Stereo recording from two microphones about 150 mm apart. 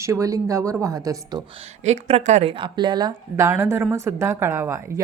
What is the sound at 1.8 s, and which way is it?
A woman's voice, 50° right (ahead or behind).